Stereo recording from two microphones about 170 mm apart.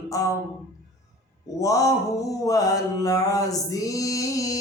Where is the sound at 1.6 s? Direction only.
20° left (ahead or behind).